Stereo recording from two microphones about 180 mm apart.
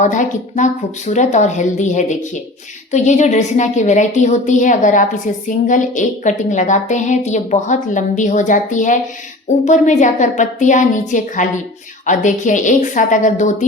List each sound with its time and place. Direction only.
0.0 s a woman's voice: 45° left (ahead or behind)